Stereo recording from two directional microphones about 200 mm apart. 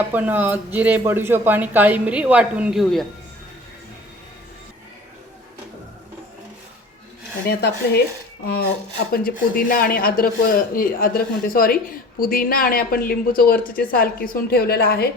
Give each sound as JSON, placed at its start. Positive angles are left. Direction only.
{"t": 0.1, "sound": "speech", "side_deg": -10}
{"t": 7.4, "sound": "a woman's voice", "side_deg": 55}